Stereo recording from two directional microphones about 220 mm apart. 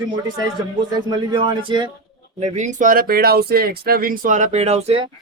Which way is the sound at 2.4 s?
35° right (ahead or behind).